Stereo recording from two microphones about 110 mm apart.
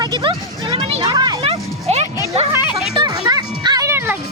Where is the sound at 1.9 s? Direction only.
70° right (ahead or behind).